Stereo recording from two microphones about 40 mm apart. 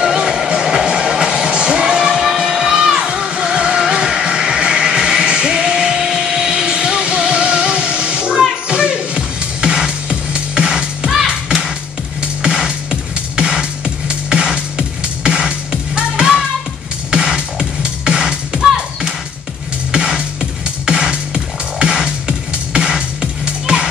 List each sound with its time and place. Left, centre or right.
0.0 s music: centre
12.2 s music: right